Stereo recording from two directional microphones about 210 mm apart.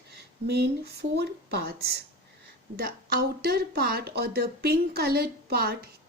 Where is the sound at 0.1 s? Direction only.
50° right (ahead or behind).